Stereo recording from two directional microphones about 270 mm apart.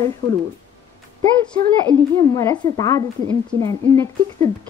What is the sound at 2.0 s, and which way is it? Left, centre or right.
A woman's voice, centre.